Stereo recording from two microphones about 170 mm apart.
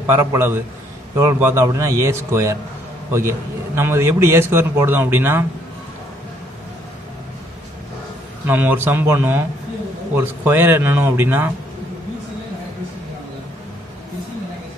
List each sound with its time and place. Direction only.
0.0 s a man's voice: 15° right (ahead or behind)
8.5 s a man's voice: 10° right (ahead or behind)